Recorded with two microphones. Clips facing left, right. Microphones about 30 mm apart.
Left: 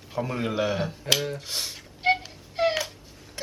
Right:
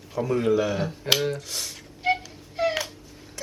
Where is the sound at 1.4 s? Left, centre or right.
Left.